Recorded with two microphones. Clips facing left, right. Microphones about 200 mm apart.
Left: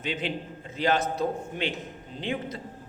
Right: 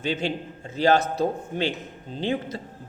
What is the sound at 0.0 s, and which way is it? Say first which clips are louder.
A man's voice: right 4 dB; 30° right (ahead or behind).